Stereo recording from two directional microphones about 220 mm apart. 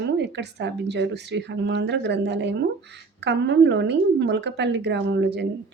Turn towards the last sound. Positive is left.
turn(degrees=-50)  # may be behind; listen again after turning